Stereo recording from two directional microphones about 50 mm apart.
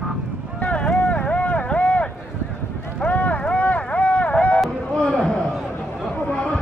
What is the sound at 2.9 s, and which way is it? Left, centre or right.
Run, left.